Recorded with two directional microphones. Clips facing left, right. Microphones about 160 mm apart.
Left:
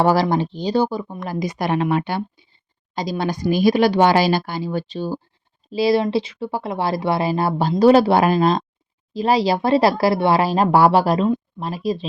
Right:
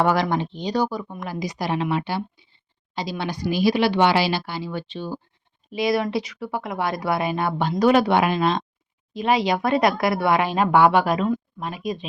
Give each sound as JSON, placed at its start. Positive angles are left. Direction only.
{"t": 0.0, "sound": "speech", "side_deg": 35}
{"t": 1.3, "sound": "speech", "side_deg": 50}